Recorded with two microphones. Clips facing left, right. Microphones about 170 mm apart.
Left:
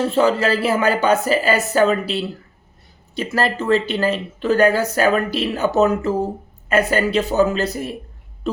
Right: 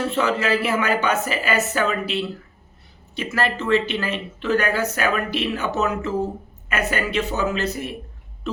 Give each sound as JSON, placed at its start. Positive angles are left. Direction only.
{"t": 0.0, "sound": "speech", "side_deg": 35}
{"t": 3.3, "sound": "speech", "side_deg": 35}